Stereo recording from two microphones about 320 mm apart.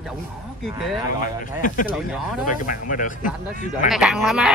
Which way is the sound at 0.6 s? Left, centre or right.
Centre.